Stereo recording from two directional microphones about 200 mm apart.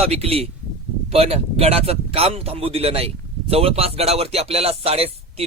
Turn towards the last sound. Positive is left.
turn(degrees=-30)  # may be behind; listen again after turning